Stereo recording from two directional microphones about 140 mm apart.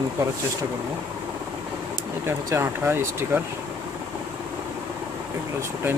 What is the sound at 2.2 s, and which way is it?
Speech, 15° right (ahead or behind).